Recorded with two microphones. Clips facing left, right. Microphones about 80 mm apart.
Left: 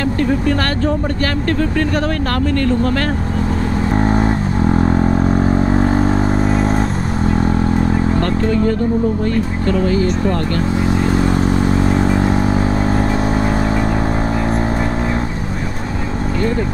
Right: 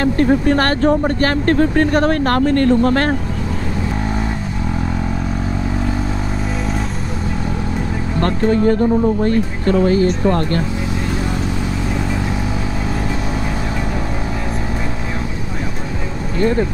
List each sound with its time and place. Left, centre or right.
0.0 s speech: right
3.9 s vehicle: left
6.5 s a sound: left
8.2 s speech: right